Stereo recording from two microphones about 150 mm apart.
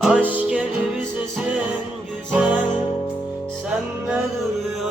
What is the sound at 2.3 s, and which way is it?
Music, 10° right (ahead or behind).